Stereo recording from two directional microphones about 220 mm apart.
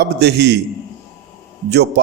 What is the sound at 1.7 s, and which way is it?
Speech, 50° right (ahead or behind).